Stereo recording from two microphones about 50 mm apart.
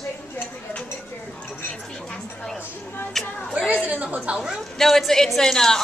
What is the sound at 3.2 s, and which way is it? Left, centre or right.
Speech, centre.